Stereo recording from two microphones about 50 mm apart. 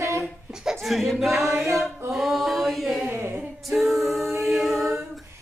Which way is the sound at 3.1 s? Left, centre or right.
Right.